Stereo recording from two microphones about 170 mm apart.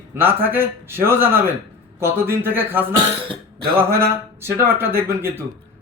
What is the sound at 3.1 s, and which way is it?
Speech, 30° right (ahead or behind).